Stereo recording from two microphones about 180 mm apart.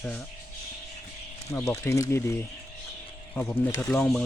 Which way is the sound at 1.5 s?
15° left (ahead or behind).